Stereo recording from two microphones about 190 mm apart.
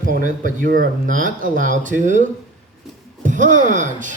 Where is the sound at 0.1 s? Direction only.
45° right (ahead or behind).